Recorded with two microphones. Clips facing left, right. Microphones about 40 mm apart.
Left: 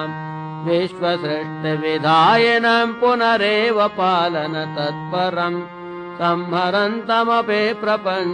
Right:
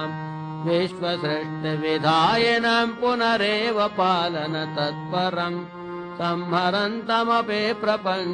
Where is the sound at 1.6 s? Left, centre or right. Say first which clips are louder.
Left 4 dB; left.